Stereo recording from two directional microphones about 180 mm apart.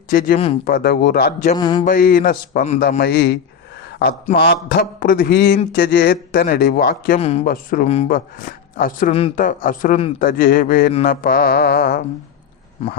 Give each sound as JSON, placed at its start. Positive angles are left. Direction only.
{"t": 0.1, "sound": "speech", "side_deg": 55}
{"t": 1.5, "sound": "a sound", "side_deg": 25}
{"t": 1.8, "sound": "speech", "side_deg": 50}
{"t": 3.0, "sound": "speech", "side_deg": 65}
{"t": 4.4, "sound": "speech", "side_deg": 55}
{"t": 7.2, "sound": "speech", "side_deg": 35}
{"t": 7.4, "sound": "speech", "side_deg": 50}
{"t": 7.9, "sound": "speech", "side_deg": 35}
{"t": 8.1, "sound": "speech", "side_deg": 50}